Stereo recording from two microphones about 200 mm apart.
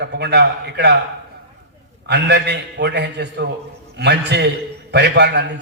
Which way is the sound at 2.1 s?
60° right (ahead or behind).